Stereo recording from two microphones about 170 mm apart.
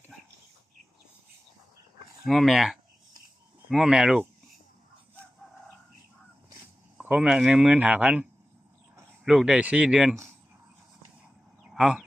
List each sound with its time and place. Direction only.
2.2 s speech: centre (ahead or behind)
7.0 s speech: 5° right (ahead or behind)
11.7 s chicken: centre (ahead or behind)